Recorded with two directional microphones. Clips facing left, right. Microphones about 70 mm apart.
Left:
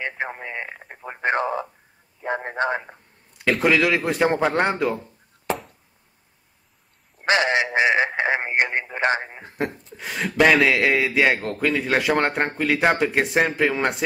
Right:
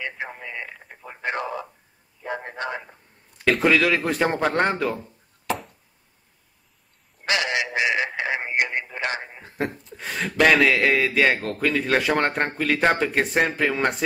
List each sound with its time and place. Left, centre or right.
0.0 s a man's voice: left
3.4 s speech: centre
7.2 s a sound: left
9.9 s a man's voice: centre